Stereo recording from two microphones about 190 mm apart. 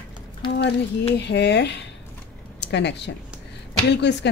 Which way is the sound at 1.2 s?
65° left (ahead or behind).